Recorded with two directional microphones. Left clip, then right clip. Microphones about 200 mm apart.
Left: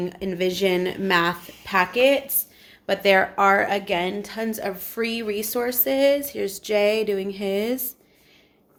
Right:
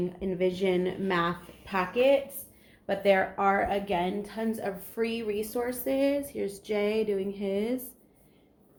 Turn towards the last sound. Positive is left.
turn(degrees=50)  # may be behind; listen again after turning